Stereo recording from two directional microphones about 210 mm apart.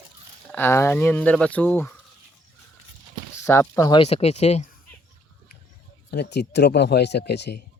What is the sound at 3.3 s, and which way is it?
Speech, 15° left (ahead or behind).